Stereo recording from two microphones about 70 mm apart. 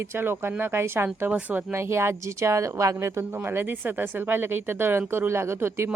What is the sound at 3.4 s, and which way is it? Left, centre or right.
A woman's voice, right.